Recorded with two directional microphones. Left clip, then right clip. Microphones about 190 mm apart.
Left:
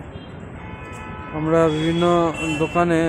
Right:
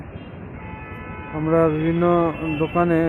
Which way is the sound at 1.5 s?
15° left (ahead or behind).